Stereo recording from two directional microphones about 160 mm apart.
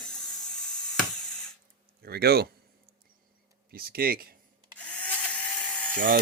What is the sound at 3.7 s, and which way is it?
Speech, 70° right (ahead or behind).